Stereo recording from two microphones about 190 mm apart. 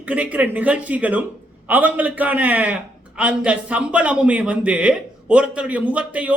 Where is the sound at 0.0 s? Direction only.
5° right (ahead or behind).